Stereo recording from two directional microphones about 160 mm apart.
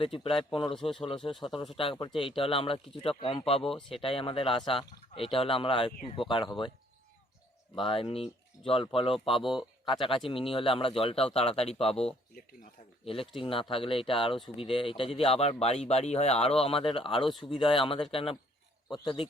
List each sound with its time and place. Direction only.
0.0 s speech: 35° left (ahead or behind)
7.8 s speech: 35° left (ahead or behind)